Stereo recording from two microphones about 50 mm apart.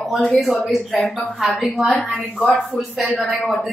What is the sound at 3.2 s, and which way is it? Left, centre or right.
Speech, centre.